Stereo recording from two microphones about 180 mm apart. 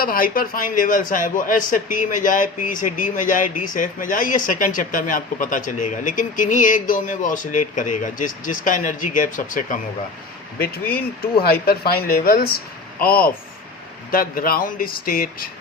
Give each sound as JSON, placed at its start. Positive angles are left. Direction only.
{"t": 0.0, "sound": "speech", "side_deg": 55}
{"t": 10.6, "sound": "speech", "side_deg": 60}